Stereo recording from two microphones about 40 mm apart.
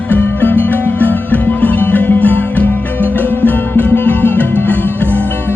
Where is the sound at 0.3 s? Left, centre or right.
Left.